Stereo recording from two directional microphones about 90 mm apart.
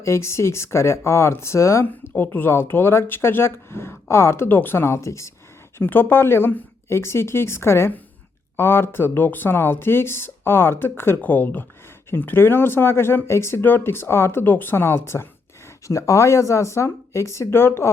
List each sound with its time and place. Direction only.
0.0 s speech: 30° left (ahead or behind)
1.9 s speech: 20° left (ahead or behind)
5.8 s speech: 20° left (ahead or behind)